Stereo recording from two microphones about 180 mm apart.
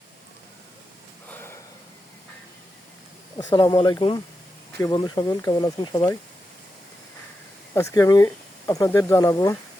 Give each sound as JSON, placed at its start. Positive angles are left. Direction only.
{"t": 1.3, "sound": "a sound", "side_deg": 15}
{"t": 3.3, "sound": "speech", "side_deg": 20}
{"t": 7.7, "sound": "speech", "side_deg": 15}